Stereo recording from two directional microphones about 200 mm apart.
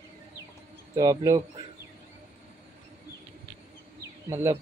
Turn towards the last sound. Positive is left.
turn(degrees=-15)  # may be behind; listen again after turning